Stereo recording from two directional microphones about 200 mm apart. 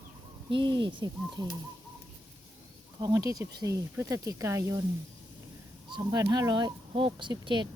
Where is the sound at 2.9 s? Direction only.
15° right (ahead or behind).